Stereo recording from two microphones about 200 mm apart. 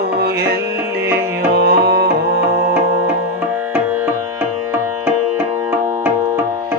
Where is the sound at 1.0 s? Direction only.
55° right (ahead or behind).